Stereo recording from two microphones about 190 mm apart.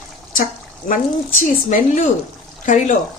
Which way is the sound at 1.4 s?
40° left (ahead or behind).